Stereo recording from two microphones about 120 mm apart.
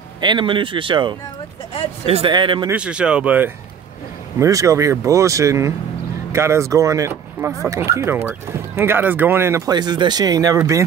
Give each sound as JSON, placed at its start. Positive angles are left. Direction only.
{"t": 0.2, "sound": "speech", "side_deg": -40}
{"t": 2.0, "sound": "speech", "side_deg": -55}
{"t": 2.3, "sound": "speech", "side_deg": -40}
{"t": 2.7, "sound": "speech", "side_deg": -10}
{"t": 4.4, "sound": "speech", "side_deg": -25}